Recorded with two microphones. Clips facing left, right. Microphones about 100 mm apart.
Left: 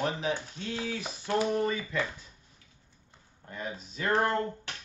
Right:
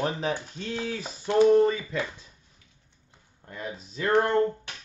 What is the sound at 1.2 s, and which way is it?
Speech, 25° right (ahead or behind).